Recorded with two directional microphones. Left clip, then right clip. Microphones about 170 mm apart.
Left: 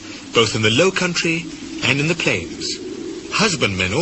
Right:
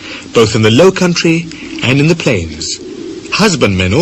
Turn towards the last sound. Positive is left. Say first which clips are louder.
# right 7 dB
turn(degrees=25)  # may be behind; listen again after turning